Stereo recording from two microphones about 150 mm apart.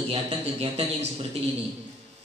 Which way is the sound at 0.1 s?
40° right (ahead or behind).